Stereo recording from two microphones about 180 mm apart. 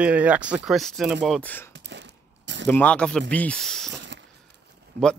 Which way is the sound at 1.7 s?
70° right (ahead or behind).